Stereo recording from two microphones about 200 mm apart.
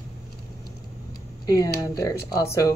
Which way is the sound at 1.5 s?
20° left (ahead or behind).